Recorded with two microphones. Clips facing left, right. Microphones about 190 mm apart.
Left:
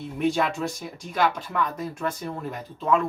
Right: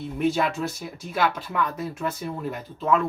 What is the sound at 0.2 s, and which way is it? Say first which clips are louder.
Speech: even; centre (ahead or behind).